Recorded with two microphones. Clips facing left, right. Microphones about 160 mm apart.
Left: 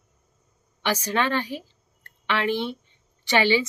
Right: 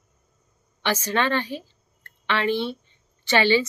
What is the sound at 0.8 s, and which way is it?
A woman's voice, 10° left (ahead or behind).